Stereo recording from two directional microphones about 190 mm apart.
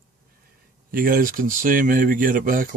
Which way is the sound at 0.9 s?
45° right (ahead or behind).